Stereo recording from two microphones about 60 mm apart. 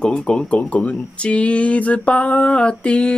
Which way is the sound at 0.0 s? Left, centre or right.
Centre.